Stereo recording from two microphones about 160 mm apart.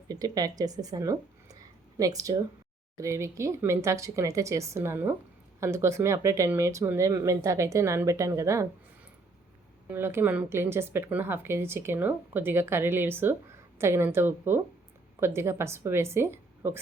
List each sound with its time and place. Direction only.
0.1 s speech: 20° right (ahead or behind)
9.9 s a woman's voice: 15° right (ahead or behind)